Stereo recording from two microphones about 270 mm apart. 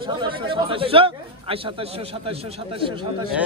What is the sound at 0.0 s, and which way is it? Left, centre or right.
Speech, centre.